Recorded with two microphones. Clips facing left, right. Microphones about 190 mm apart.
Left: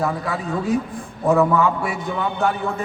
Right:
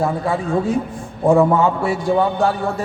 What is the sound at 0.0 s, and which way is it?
A man's voice, 25° right (ahead or behind).